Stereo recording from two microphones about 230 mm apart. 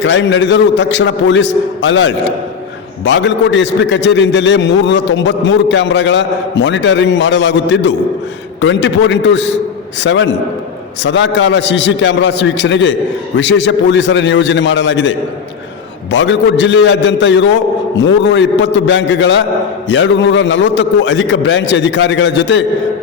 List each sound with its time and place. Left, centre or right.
0.0 s a man's voice: left
16.1 s a man's voice: left